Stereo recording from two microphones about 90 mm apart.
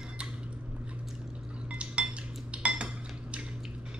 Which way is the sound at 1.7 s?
10° right (ahead or behind).